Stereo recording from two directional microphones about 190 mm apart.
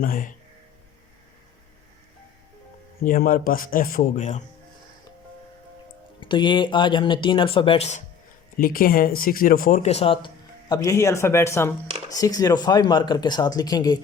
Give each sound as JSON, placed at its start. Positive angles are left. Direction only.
{"t": 0.0, "sound": "speech", "side_deg": 50}
{"t": 3.0, "sound": "speech", "side_deg": 45}
{"t": 6.1, "sound": "speech", "side_deg": 25}
{"t": 8.5, "sound": "speech", "side_deg": 50}